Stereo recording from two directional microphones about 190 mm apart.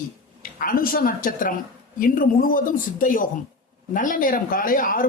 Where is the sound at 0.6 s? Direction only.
50° left (ahead or behind).